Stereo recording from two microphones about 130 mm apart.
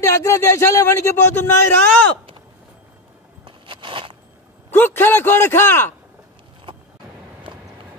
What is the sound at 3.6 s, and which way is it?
Crackle, 40° right (ahead or behind).